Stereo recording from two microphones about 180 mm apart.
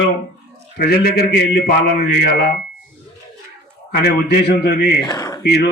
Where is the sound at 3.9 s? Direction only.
65° left (ahead or behind).